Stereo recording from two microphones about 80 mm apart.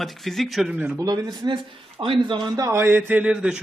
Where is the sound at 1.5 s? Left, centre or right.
Right.